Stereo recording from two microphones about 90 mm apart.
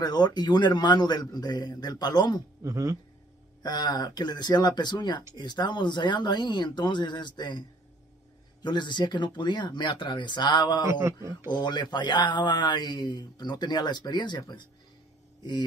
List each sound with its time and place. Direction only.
0.0 s a man's voice: 50° left (ahead or behind)
2.6 s speech: 35° right (ahead or behind)
3.6 s a man's voice: 50° left (ahead or behind)
8.6 s speech: 60° left (ahead or behind)
10.9 s speech: 35° right (ahead or behind)
11.4 s speech: 55° left (ahead or behind)